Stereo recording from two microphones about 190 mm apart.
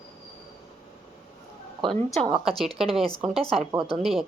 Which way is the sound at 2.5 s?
Centre (ahead or behind).